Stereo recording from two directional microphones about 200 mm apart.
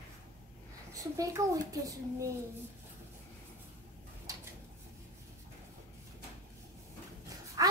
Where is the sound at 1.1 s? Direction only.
15° right (ahead or behind).